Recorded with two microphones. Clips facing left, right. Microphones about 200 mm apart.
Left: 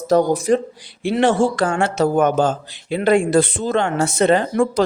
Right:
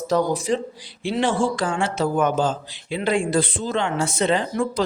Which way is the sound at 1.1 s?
70° left (ahead or behind).